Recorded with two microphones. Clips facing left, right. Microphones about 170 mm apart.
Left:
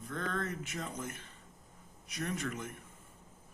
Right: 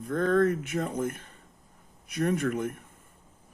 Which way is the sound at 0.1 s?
50° right (ahead or behind).